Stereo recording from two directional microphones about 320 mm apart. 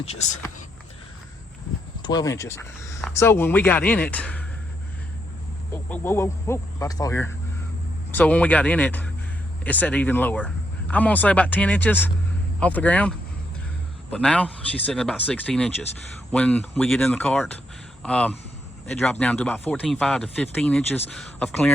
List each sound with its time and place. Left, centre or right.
0.0 s speech: centre
2.0 s speech: centre
5.7 s speech: centre